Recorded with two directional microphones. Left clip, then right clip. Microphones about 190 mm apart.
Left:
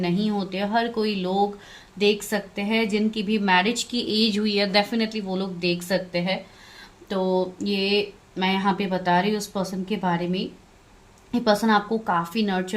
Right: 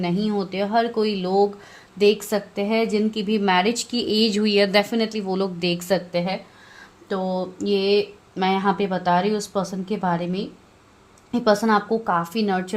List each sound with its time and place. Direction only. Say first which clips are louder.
0.0 s a woman's voice: right 2 dB; 30° right (ahead or behind)